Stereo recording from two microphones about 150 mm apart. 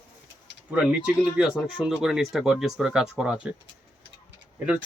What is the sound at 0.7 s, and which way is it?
Speech, 10° right (ahead or behind).